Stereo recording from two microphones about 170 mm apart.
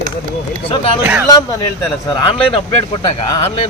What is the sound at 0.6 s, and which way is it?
Speech, 30° left (ahead or behind).